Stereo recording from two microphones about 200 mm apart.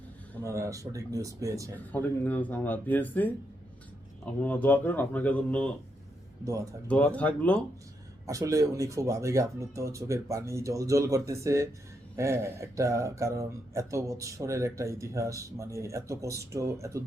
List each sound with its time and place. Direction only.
0.4 s speech: 15° right (ahead or behind)
1.9 s speech: 10° left (ahead or behind)
6.8 s speech: 5° left (ahead or behind)
8.3 s speech: 15° right (ahead or behind)